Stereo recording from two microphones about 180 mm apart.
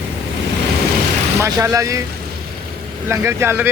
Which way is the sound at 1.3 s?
15° right (ahead or behind).